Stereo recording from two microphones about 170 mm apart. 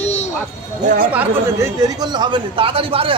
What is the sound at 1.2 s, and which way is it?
Speech, 20° right (ahead or behind).